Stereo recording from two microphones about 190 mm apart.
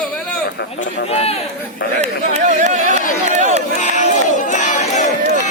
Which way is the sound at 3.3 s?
35° right (ahead or behind).